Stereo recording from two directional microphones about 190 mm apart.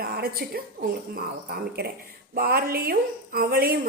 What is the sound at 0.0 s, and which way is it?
A woman's voice, 55° right (ahead or behind).